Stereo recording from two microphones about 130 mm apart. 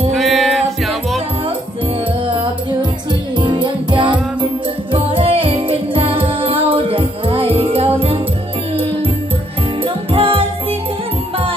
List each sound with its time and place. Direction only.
0.1 s music: centre (ahead or behind)
2.2 s music: 40° right (ahead or behind)
9.8 s music: 45° right (ahead or behind)